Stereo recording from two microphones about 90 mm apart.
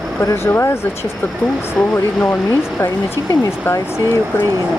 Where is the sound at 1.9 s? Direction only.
25° left (ahead or behind).